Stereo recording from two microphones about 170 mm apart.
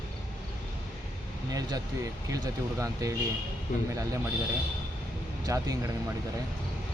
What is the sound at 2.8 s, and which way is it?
Speech, 20° right (ahead or behind).